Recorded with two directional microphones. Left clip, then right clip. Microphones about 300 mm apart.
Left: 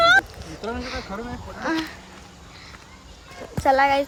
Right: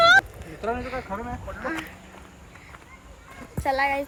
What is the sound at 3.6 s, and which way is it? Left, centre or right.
Speech, left.